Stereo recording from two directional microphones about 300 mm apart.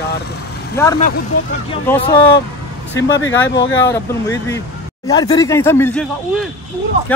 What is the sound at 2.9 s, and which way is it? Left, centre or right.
Speech, left.